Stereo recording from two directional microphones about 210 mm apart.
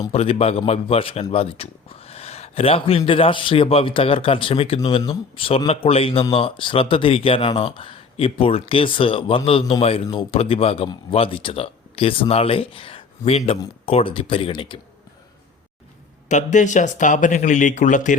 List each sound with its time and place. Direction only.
0.1 s a man's voice: 30° left (ahead or behind)
16.3 s speech: 35° left (ahead or behind)